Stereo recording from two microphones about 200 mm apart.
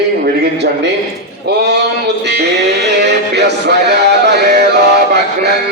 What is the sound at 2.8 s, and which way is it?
Music, 60° right (ahead or behind).